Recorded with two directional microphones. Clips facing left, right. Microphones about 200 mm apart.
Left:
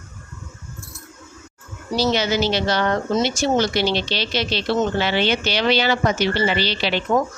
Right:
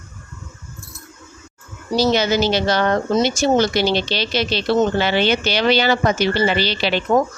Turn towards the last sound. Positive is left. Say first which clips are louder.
# right 3 dB
turn(degrees=-45)  # may be behind; listen again after turning